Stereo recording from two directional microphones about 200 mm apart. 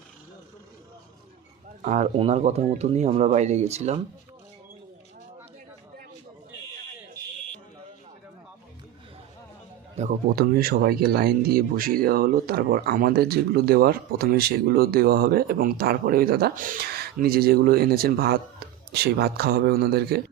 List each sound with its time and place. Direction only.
1.8 s speech: 35° right (ahead or behind)
10.0 s speech: 45° right (ahead or behind)